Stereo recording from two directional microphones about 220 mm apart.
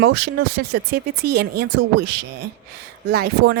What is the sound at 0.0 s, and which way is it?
Speech, 45° right (ahead or behind).